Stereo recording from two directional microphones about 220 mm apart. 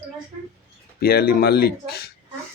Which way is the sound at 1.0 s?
45° left (ahead or behind).